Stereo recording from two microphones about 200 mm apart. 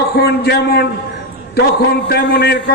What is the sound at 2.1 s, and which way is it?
Speech, 55° left (ahead or behind).